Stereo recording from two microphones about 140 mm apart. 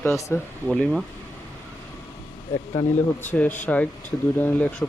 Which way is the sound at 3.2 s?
10° left (ahead or behind).